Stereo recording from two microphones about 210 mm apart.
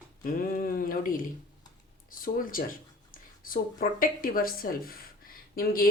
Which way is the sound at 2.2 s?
40° left (ahead or behind).